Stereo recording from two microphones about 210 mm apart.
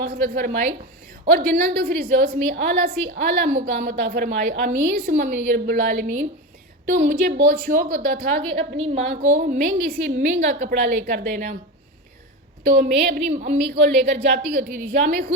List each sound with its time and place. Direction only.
0.0 s a woman's voice: 45° right (ahead or behind)
8.4 s a woman's voice: 25° right (ahead or behind); by 11.5 s 40° right (ahead or behind)
12.6 s a woman's voice: 45° right (ahead or behind)